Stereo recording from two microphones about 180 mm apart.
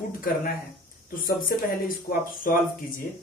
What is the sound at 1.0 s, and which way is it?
Speech, 50° left (ahead or behind).